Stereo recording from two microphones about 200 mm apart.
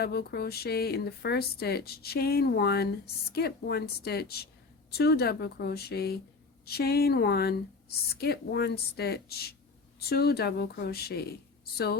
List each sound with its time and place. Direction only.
0.0 s speech: 50° left (ahead or behind)